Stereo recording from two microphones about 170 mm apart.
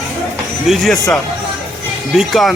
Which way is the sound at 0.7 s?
Centre (ahead or behind).